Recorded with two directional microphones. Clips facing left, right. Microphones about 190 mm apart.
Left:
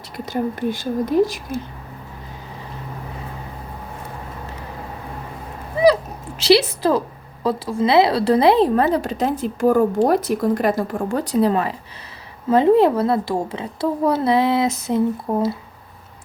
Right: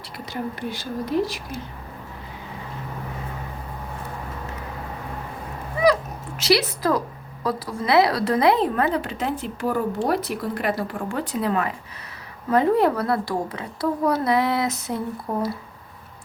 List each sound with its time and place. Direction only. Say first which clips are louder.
0.3 s speech: left 7 dB; 45° left (ahead or behind)
5.8 s dog: left 4 dB; 30° left (ahead or behind)
6.4 s a woman's voice: left 5 dB; 30° left (ahead or behind)